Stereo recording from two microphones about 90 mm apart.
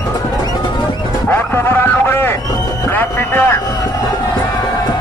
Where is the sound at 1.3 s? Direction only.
25° left (ahead or behind).